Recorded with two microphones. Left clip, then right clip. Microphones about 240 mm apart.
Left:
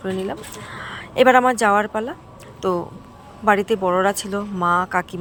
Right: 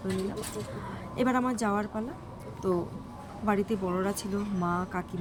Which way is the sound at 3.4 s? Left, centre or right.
Left.